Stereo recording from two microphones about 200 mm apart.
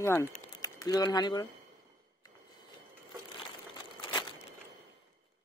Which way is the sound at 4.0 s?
25° left (ahead or behind).